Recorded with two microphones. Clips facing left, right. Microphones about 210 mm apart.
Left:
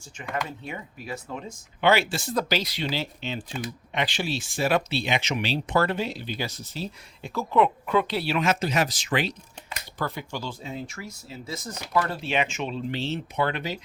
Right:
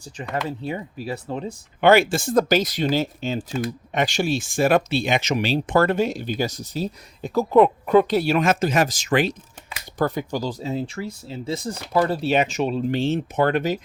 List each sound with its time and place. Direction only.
0.1 s speech: 35° right (ahead or behind)
1.8 s speech: 50° right (ahead or behind)